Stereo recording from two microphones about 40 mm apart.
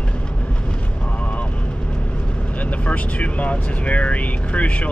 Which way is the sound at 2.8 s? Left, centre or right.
Left.